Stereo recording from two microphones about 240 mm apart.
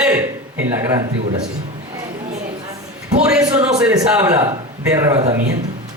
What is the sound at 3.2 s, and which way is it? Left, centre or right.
A man's voice, centre.